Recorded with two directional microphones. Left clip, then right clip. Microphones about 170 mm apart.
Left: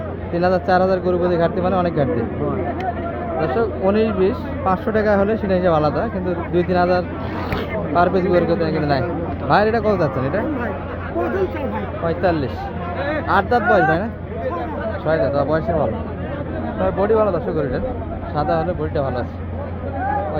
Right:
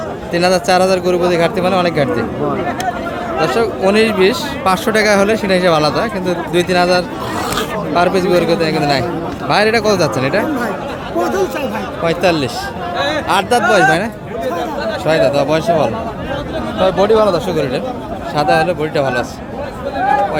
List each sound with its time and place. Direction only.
0.3 s speech: 10° right (ahead or behind)
3.5 s speech: 15° right (ahead or behind)
12.0 s speech: 20° right (ahead or behind)
15.2 s speech: 15° right (ahead or behind)